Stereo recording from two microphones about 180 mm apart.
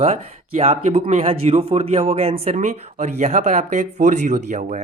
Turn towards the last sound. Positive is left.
turn(degrees=-45)  # may be behind; listen again after turning